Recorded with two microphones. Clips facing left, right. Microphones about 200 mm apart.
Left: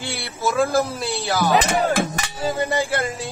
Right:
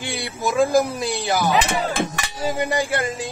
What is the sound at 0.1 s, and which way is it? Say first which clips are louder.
A man's voice: even; 15° right (ahead or behind).